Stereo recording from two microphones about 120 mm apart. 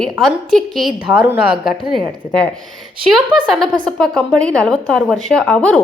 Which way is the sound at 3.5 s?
Centre (ahead or behind).